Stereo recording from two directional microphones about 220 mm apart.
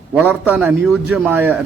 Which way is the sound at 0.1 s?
5° right (ahead or behind).